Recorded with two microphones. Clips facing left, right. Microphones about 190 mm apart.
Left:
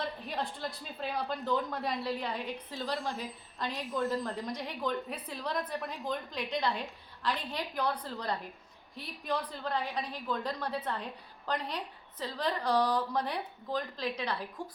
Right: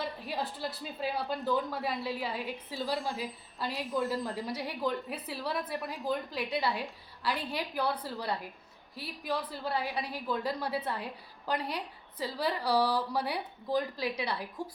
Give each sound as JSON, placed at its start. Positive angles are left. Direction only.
{"t": 0.0, "sound": "a woman's voice", "side_deg": 0}